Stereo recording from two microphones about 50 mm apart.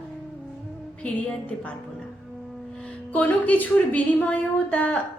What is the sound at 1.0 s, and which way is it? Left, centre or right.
Music, left.